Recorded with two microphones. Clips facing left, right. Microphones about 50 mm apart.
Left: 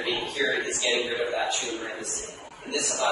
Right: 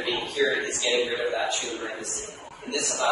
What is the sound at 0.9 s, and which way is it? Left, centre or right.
Speech, right.